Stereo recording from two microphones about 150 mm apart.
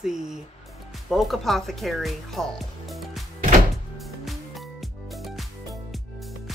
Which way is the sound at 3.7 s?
Centre (ahead or behind).